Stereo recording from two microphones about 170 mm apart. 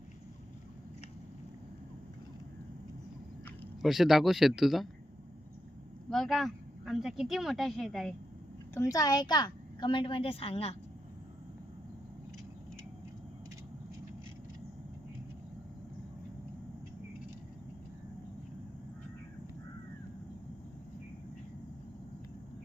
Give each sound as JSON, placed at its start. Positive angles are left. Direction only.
{"t": 3.8, "sound": "speech", "side_deg": 0}
{"t": 6.1, "sound": "speech", "side_deg": 0}
{"t": 8.7, "sound": "a woman's voice", "side_deg": 20}